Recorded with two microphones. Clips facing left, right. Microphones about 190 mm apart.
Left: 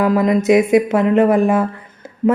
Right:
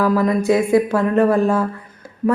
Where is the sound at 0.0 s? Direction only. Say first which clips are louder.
Left 2 dB; 20° left (ahead or behind).